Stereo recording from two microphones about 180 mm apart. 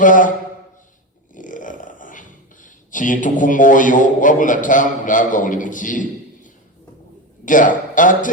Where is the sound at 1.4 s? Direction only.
45° left (ahead or behind).